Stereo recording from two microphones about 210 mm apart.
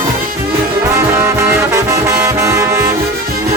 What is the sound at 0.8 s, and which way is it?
Music, 15° right (ahead or behind).